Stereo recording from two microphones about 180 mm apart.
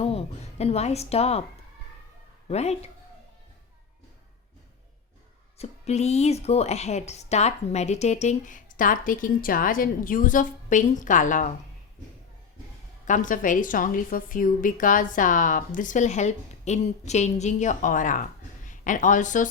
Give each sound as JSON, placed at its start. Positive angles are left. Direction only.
{"t": 0.0, "sound": "a woman's voice", "side_deg": 35}
{"t": 2.5, "sound": "a woman's voice", "side_deg": 35}
{"t": 5.5, "sound": "a woman's voice", "side_deg": 35}
{"t": 13.1, "sound": "a woman's voice", "side_deg": 45}